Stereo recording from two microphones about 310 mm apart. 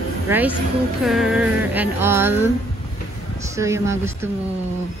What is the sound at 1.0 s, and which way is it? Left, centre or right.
Music, centre.